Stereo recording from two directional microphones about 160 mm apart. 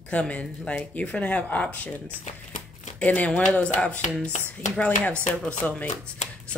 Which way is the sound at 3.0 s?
10° left (ahead or behind).